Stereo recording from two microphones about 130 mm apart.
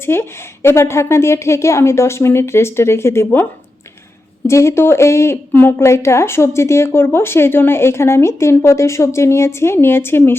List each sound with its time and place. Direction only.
0.0 s a woman's voice: 20° left (ahead or behind)
4.4 s a woman's voice: 20° left (ahead or behind)